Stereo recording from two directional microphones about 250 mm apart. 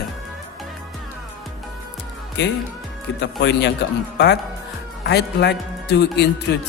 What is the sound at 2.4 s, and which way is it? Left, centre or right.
A man's voice, left.